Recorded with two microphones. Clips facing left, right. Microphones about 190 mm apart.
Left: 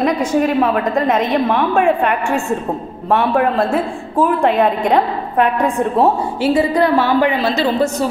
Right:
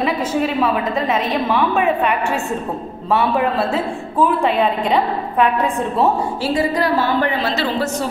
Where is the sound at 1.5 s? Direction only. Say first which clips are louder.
Even; 50° left (ahead or behind).